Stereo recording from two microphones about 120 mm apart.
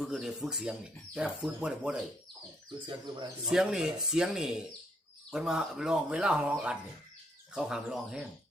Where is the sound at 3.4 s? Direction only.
5° right (ahead or behind).